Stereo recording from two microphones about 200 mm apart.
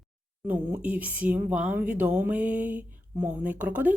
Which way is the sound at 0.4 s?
10° right (ahead or behind).